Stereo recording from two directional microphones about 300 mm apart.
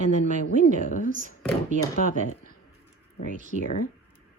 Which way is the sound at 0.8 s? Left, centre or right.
Left.